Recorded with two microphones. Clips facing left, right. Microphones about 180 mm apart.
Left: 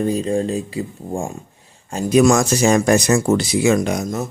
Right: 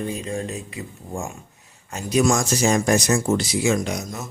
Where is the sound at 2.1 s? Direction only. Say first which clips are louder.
Left 6 dB; 65° left (ahead or behind).